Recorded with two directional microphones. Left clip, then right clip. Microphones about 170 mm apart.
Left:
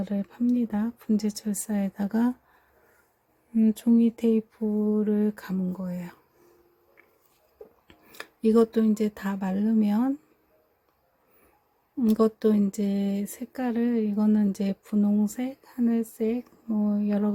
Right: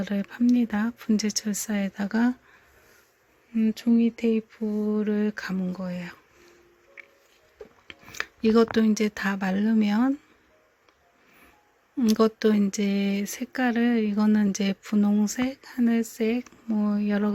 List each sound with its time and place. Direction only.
0.0 s speech: 5° left (ahead or behind)
3.5 s speech: 20° left (ahead or behind)
4.6 s speech: centre (ahead or behind)
5.0 s a sound: 10° left (ahead or behind)
5.8 s speech: centre (ahead or behind)
7.9 s a sound: 10° left (ahead or behind)
8.7 s speech: centre (ahead or behind)
11.9 s speech: 5° left (ahead or behind)